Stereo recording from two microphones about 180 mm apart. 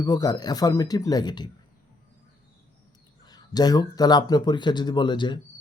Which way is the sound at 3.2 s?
20° left (ahead or behind).